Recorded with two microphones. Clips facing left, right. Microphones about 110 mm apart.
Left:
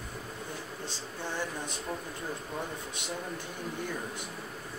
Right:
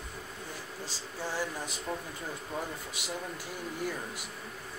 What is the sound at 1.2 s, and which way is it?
Speech, 10° right (ahead or behind).